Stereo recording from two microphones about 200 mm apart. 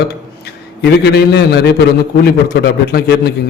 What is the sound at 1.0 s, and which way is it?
A man's voice, 55° left (ahead or behind).